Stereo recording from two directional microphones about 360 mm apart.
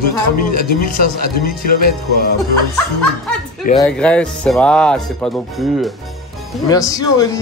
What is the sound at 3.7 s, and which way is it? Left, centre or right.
Speech, centre.